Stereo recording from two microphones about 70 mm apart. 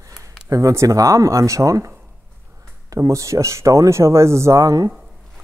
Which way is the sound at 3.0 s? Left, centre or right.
Right.